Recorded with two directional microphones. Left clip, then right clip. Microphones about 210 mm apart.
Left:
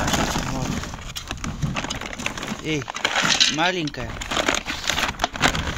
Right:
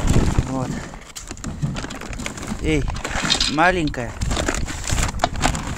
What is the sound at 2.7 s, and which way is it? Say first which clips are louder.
Speech: right 1 dB; 35° right (ahead or behind).